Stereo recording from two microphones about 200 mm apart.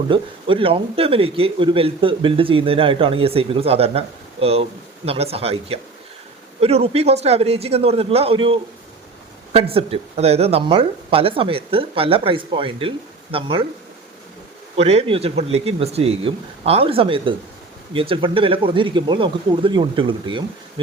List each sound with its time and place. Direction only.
0.1 s a man's voice: 25° right (ahead or behind)
14.8 s a man's voice: 30° right (ahead or behind)